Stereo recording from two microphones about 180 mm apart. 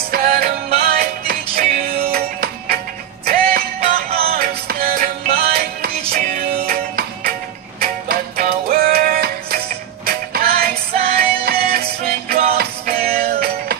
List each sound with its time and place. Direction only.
0.1 s music: 55° right (ahead or behind)